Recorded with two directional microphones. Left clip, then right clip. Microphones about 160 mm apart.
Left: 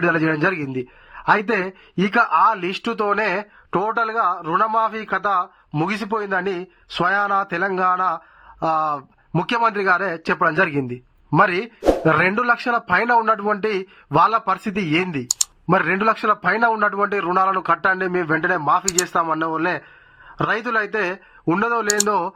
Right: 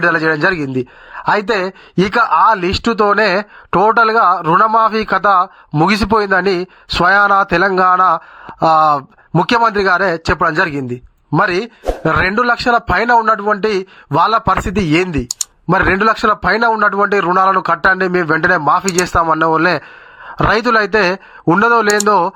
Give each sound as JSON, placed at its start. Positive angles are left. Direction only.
{"t": 0.0, "sound": "speech", "side_deg": -30}
{"t": 15.3, "sound": "computer keyboard", "side_deg": 0}
{"t": 15.7, "sound": "speech", "side_deg": -30}